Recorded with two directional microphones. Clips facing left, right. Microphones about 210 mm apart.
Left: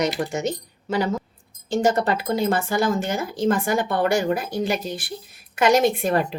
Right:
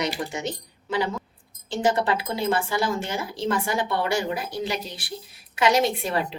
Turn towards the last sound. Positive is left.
turn(degrees=50)  # may be behind; listen again after turning